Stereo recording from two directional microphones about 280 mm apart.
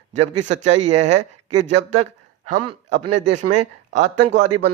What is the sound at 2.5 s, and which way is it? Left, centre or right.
A man's voice, right.